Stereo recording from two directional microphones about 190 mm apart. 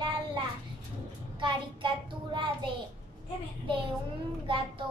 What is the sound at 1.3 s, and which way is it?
Child singing, 25° right (ahead or behind).